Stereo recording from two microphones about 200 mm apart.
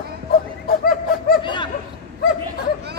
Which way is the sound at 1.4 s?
25° left (ahead or behind).